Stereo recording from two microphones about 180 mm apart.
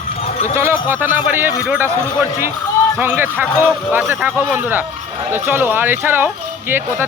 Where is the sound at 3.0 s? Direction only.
10° right (ahead or behind).